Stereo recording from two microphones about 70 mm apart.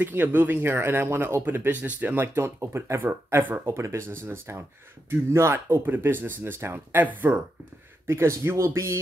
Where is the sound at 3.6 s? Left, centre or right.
Right.